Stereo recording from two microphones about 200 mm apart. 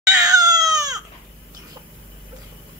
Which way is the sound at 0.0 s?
15° right (ahead or behind).